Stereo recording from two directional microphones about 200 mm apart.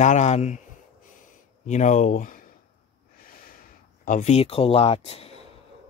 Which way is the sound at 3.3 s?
45° left (ahead or behind).